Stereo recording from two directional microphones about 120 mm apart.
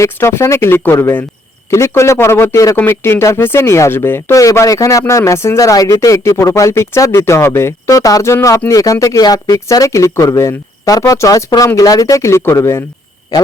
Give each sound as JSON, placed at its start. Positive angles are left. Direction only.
{"t": 0.0, "sound": "speech", "side_deg": 20}